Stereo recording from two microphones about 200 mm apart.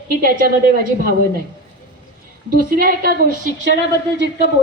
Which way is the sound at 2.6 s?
45° right (ahead or behind).